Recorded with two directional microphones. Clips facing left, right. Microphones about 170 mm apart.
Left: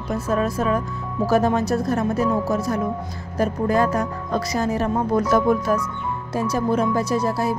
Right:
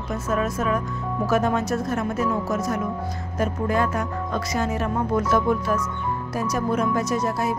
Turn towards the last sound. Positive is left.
turn(degrees=35)  # may be behind; listen again after turning